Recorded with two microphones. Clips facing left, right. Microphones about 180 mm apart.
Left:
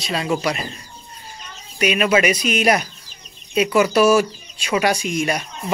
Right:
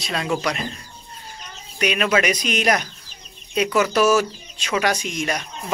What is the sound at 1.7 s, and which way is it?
Speech, 10° left (ahead or behind).